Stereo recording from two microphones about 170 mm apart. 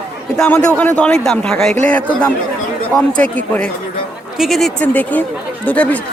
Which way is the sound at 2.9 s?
5° left (ahead or behind).